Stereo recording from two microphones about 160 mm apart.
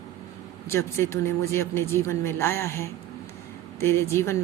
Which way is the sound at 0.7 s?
15° left (ahead or behind).